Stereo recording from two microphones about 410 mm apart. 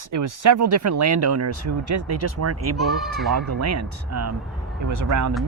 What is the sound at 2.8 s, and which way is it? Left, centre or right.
Speech, centre.